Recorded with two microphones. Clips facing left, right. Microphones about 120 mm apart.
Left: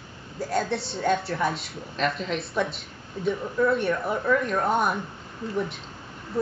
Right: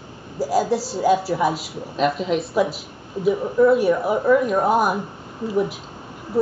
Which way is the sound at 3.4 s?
20° right (ahead or behind).